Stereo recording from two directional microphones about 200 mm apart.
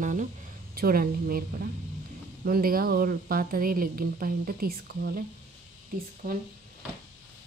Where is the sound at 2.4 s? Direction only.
45° right (ahead or behind).